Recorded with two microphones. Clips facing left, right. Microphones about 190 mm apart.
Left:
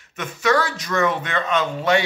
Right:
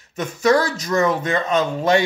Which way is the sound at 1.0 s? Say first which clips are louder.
Right 2 dB; 40° right (ahead or behind).